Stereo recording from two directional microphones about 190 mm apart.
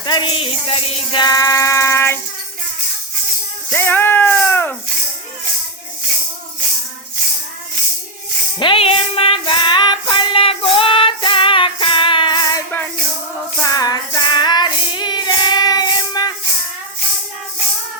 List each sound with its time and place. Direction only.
0.0 s a sound: 25° left (ahead or behind)
3.7 s music: 10° left (ahead or behind)
8.5 s female singing: 25° left (ahead or behind)
13.7 s child singing: 20° left (ahead or behind)